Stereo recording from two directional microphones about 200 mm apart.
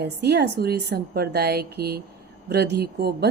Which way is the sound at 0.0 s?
55° right (ahead or behind).